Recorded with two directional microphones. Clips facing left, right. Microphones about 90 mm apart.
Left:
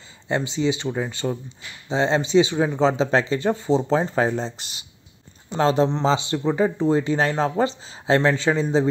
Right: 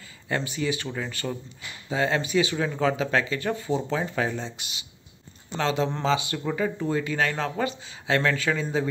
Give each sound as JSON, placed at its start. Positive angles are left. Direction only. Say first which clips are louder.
{"t": 0.3, "sound": "speech", "louder": "left 5 dB", "side_deg": 20}
{"t": 5.9, "sound": "speech", "louder": "left 4 dB", "side_deg": 25}